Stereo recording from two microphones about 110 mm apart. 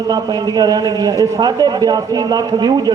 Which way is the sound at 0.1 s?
40° right (ahead or behind).